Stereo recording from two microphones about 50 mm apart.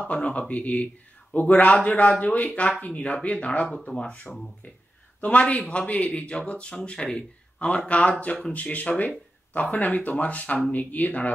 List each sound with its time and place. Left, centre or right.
0.1 s speech: left
1.3 s speech: left
1.9 s speech: left
5.2 s speech: left